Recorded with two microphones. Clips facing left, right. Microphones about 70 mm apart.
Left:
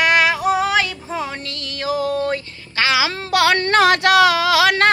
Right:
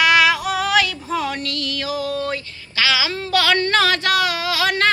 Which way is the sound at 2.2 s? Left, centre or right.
Left.